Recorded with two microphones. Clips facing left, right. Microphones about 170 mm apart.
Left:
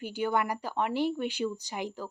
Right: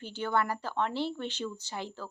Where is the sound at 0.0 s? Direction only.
10° left (ahead or behind).